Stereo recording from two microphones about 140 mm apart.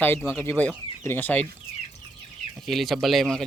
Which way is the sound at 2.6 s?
Centre (ahead or behind).